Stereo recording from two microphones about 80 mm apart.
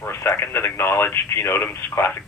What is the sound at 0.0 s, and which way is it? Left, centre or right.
Speech, left.